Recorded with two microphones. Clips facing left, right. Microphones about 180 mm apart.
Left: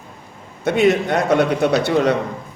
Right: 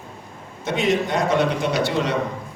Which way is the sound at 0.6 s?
60° left (ahead or behind).